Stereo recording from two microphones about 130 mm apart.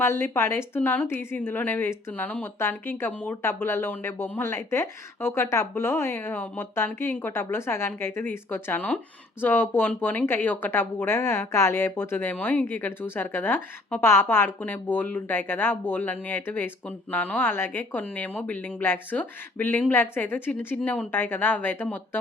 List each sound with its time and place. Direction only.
0.0 s speech: 20° left (ahead or behind)